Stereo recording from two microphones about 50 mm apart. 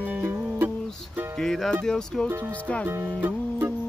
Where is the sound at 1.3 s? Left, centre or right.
Centre.